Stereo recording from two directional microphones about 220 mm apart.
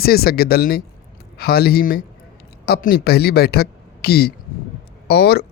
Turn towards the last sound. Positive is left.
turn(degrees=45)  # may be behind; listen again after turning